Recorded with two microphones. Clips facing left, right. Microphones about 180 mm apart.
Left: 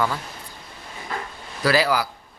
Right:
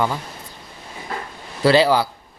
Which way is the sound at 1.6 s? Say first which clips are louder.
Right 5 dB; 25° right (ahead or behind).